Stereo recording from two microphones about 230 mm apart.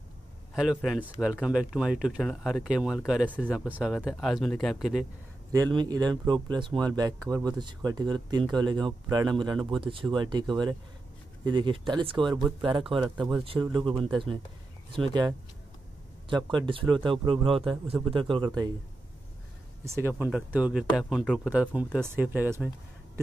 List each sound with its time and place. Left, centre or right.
0.6 s speech: centre
5.5 s speech: centre
16.3 s speech: centre
19.8 s speech: centre